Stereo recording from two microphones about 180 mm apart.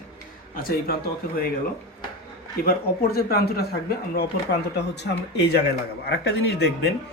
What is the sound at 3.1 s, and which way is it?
Speech, 60° left (ahead or behind).